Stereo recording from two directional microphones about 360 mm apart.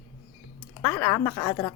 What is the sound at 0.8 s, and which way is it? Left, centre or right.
Speech, centre.